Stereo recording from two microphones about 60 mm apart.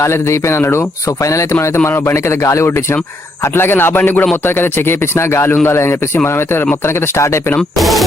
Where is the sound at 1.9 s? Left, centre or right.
Left.